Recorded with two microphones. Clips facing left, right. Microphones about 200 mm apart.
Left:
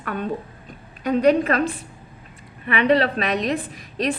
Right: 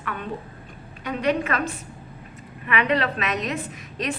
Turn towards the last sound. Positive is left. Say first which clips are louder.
# left 5 dB
turn(degrees=35)  # may be behind; listen again after turning